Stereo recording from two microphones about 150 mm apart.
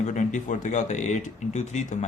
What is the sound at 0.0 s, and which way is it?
Speech, 55° left (ahead or behind).